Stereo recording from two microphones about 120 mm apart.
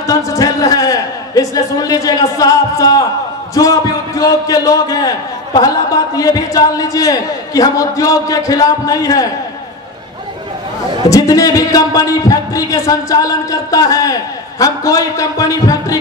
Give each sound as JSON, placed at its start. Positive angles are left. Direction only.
{"t": 0.0, "sound": "a man's voice", "side_deg": 30}
{"t": 11.1, "sound": "a man's voice", "side_deg": 30}